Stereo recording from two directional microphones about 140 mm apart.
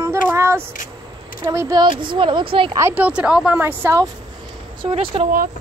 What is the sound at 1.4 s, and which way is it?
Speech, 25° right (ahead or behind).